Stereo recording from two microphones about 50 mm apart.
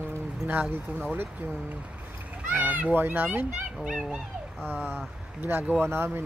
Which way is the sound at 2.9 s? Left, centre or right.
Right.